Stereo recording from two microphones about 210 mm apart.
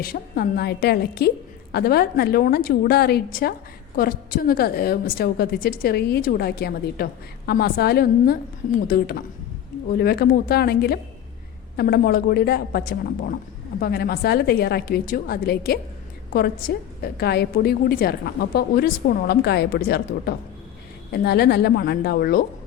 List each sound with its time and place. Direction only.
0.0 s a woman's voice: 45° left (ahead or behind)